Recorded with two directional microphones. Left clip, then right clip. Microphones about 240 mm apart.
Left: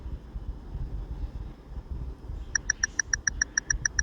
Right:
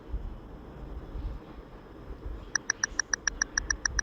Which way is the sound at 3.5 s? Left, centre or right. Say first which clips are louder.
Left 2 dB; centre.